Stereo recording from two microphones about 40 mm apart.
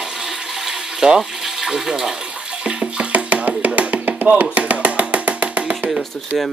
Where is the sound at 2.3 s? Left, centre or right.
Right.